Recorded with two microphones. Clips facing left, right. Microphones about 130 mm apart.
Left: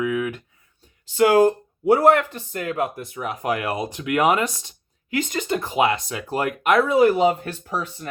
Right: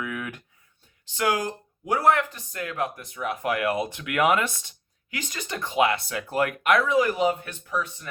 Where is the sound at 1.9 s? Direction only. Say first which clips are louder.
Left 6 dB; 35° left (ahead or behind).